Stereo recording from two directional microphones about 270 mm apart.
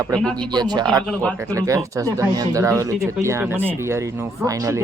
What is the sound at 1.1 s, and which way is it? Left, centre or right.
Speech, centre.